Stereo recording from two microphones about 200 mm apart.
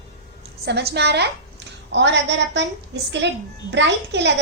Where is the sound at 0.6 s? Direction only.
55° right (ahead or behind).